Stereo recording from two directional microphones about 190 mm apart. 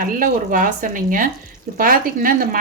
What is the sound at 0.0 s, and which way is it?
A woman's voice, 45° right (ahead or behind).